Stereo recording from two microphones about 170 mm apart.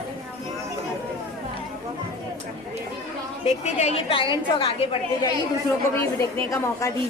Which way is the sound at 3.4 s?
40° left (ahead or behind).